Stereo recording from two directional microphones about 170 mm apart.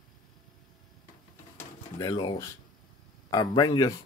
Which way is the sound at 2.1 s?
25° left (ahead or behind).